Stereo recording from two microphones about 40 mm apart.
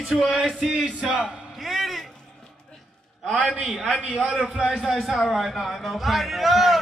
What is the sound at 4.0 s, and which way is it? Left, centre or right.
Speech, right.